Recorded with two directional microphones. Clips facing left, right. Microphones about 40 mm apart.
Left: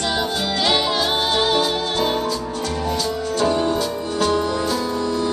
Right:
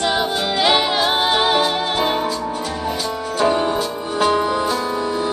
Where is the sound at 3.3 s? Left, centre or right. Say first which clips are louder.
Right 2 dB; centre.